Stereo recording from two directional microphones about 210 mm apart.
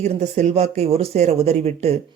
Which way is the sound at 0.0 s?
30° right (ahead or behind).